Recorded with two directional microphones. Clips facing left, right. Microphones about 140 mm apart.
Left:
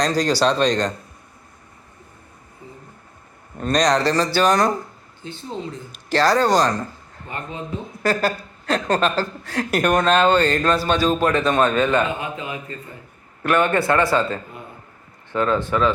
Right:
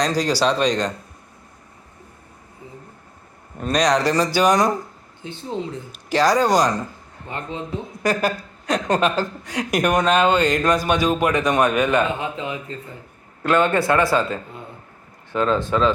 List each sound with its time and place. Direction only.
0.0 s a woman's voice: 10° right (ahead or behind)
3.6 s a woman's voice: 5° right (ahead or behind)
7.3 s a woman's voice: 25° right (ahead or behind)